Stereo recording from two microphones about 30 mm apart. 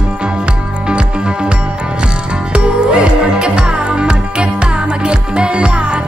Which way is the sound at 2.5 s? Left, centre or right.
Right.